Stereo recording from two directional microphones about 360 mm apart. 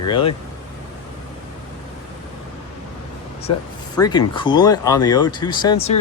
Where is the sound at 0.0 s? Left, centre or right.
Centre.